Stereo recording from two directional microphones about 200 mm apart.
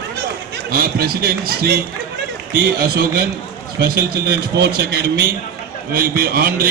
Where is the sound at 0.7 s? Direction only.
50° right (ahead or behind).